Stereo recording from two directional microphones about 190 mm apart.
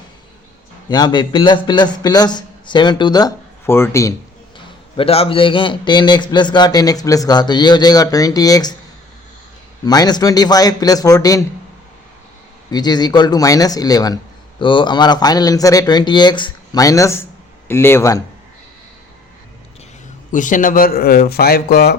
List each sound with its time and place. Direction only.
0.9 s a man's voice: 20° left (ahead or behind)
4.5 s a man's voice: 30° left (ahead or behind)
9.8 s a man's voice: 20° left (ahead or behind)
12.7 s a man's voice: 20° left (ahead or behind)
20.3 s a man's voice: 45° left (ahead or behind)